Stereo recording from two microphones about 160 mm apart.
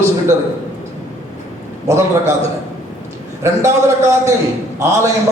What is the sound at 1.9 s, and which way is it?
Speech, 15° right (ahead or behind).